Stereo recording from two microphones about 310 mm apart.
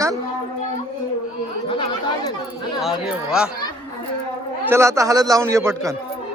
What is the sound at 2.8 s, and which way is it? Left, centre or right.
Speech, centre.